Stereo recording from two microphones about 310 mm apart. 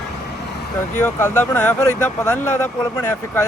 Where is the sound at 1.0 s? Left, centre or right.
Centre.